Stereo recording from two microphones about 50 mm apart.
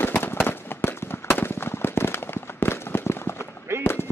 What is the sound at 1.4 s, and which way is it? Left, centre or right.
Firecracker, left.